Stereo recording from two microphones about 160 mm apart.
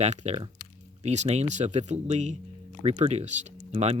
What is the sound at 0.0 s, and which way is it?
Speech, 45° right (ahead or behind).